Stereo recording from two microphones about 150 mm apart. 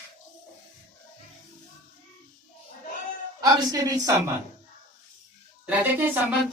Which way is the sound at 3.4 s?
25° right (ahead or behind).